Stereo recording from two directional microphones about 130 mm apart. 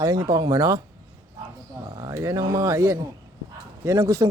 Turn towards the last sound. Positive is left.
turn(degrees=-25)  # may be behind; listen again after turning